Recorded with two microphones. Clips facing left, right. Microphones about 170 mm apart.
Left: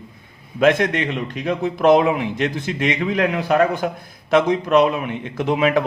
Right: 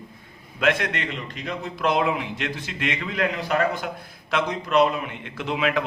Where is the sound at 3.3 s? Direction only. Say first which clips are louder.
Left 6 dB; 60° left (ahead or behind).